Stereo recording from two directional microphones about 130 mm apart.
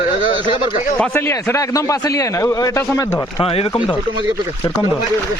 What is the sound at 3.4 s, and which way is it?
Speech, 45° left (ahead or behind).